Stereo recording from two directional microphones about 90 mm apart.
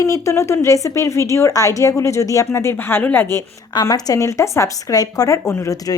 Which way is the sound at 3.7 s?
50° left (ahead or behind).